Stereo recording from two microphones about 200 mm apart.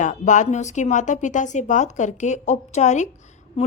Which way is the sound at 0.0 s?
40° left (ahead or behind).